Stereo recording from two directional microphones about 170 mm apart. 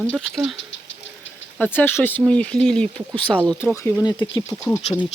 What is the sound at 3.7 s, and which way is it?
Speech, 15° left (ahead or behind).